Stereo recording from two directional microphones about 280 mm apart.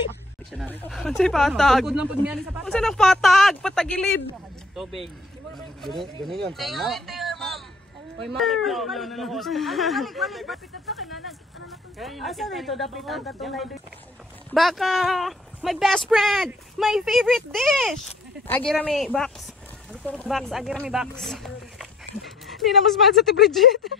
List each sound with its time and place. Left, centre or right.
0.5 s speech: centre
5.5 s speech: centre
6.5 s a sound: centre
8.4 s speech: centre